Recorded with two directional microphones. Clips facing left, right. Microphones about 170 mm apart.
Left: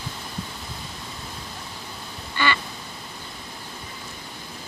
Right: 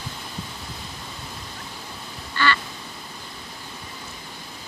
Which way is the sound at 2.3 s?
15° left (ahead or behind).